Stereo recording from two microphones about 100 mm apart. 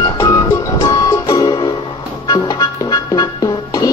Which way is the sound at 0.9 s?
40° left (ahead or behind).